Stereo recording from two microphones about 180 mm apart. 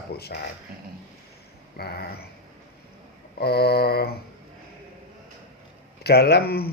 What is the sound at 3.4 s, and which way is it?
Speech, 60° left (ahead or behind).